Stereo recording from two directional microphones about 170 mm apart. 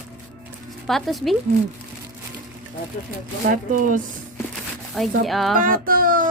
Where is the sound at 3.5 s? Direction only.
50° right (ahead or behind).